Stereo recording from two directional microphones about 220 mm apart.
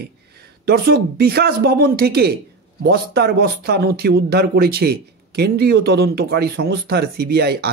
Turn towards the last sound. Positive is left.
turn(degrees=-50)  # may be behind; listen again after turning